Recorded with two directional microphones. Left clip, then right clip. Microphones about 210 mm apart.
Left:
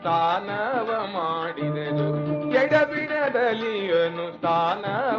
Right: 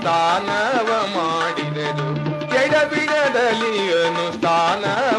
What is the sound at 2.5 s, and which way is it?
Music, 30° left (ahead or behind).